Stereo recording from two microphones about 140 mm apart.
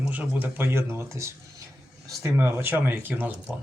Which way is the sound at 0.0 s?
10° right (ahead or behind).